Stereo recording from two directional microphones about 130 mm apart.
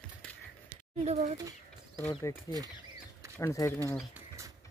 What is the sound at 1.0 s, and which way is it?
Speech, 55° right (ahead or behind).